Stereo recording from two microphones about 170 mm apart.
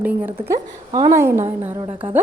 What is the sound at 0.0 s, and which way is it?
A woman's voice, 10° right (ahead or behind).